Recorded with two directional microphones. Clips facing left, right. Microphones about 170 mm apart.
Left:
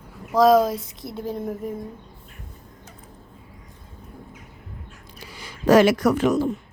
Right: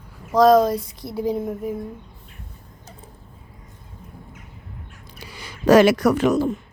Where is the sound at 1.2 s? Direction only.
10° right (ahead or behind).